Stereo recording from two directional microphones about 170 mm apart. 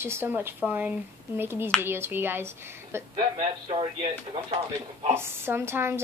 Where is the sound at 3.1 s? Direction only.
30° right (ahead or behind).